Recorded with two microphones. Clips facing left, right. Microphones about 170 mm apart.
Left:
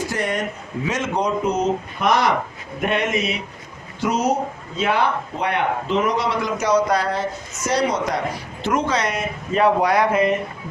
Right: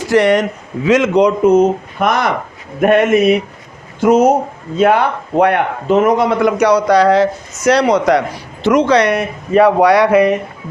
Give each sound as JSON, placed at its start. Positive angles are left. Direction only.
{"t": 0.0, "sound": "a man's voice", "side_deg": -80}
{"t": 1.5, "sound": "a man's voice", "side_deg": -55}
{"t": 8.6, "sound": "a man's voice", "side_deg": -85}